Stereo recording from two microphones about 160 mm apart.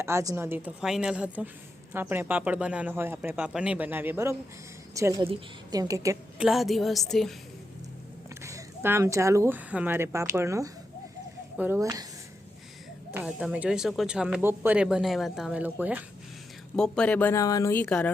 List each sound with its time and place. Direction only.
0.0 s speech: 20° right (ahead or behind)
0.8 s a woman's voice: 5° right (ahead or behind); by 6.1 s 20° right (ahead or behind)
6.4 s speech: centre (ahead or behind)
8.4 s speech: 20° right (ahead or behind)
13.1 s speech: 5° right (ahead or behind)
16.7 s speech: 5° left (ahead or behind)